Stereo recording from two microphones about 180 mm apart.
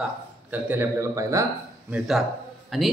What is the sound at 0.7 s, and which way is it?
Speech, 15° right (ahead or behind).